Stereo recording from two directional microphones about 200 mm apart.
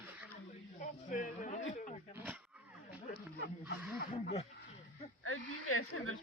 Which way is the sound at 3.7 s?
50° left (ahead or behind).